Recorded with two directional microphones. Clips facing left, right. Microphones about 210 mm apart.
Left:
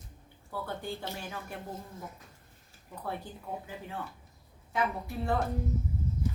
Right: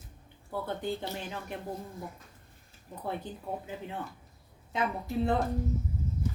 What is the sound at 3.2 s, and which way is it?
Speech, 20° right (ahead or behind).